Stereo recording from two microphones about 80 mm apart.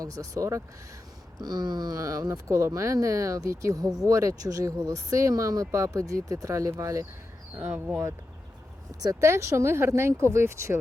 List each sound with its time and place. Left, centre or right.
0.0 s speech: right
1.4 s speech: right
7.5 s speech: centre
9.2 s speech: right